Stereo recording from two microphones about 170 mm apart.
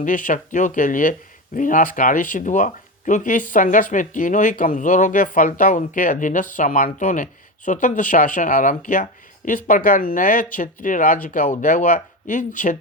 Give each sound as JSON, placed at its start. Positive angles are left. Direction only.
{"t": 0.0, "sound": "speech", "side_deg": 50}